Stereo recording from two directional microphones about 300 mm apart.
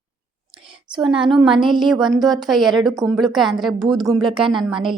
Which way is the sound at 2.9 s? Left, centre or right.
Centre.